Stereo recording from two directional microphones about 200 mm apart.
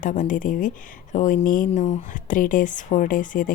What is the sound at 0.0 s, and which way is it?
Speech, 40° left (ahead or behind).